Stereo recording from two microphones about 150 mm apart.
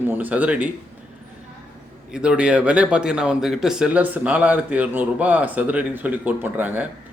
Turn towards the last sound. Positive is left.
turn(degrees=-10)  # may be behind; listen again after turning